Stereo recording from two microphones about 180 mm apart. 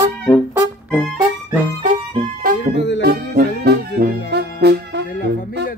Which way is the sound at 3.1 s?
55° right (ahead or behind).